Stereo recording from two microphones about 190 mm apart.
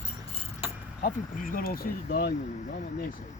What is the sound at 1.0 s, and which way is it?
Speech, 45° left (ahead or behind).